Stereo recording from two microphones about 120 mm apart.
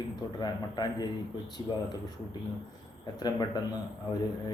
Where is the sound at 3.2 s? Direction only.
35° left (ahead or behind).